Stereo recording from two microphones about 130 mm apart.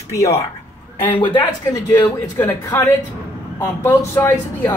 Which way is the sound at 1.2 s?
40° left (ahead or behind).